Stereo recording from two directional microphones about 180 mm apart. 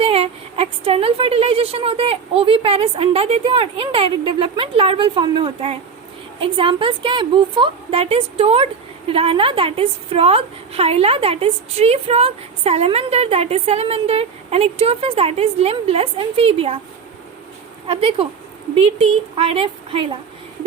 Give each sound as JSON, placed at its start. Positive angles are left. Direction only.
{"t": 0.0, "sound": "a woman's voice", "side_deg": -30}
{"t": 17.8, "sound": "a woman's voice", "side_deg": -30}